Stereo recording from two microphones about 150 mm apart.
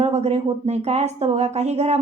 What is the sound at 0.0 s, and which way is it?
A woman's voice, 45° right (ahead or behind).